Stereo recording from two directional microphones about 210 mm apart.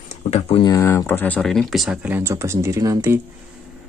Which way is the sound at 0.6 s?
15° left (ahead or behind).